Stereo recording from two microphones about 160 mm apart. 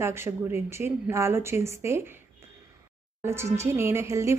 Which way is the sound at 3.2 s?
15° right (ahead or behind).